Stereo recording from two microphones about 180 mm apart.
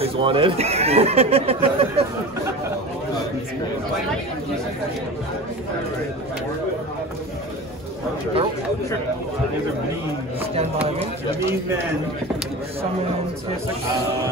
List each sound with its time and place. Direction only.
0.0 s speech: 30° right (ahead or behind)